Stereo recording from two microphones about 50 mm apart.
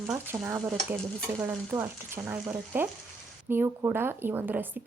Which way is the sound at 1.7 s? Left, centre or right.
Right.